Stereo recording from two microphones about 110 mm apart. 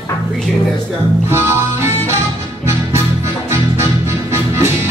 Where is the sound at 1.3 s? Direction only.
20° right (ahead or behind).